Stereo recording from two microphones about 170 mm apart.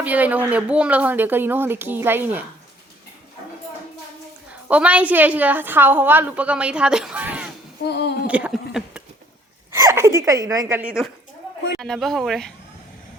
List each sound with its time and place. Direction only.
0.0 s a woman's voice: 10° right (ahead or behind)
4.7 s a woman's voice: 10° right (ahead or behind)
7.9 s a sound: 75° left (ahead or behind)
8.3 s a woman's voice: 10° right (ahead or behind)
9.7 s a woman's voice: 15° right (ahead or behind)
10.8 s speech: 5° right (ahead or behind)